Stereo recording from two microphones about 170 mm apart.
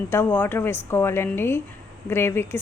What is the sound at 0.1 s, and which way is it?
A woman's voice, 10° left (ahead or behind).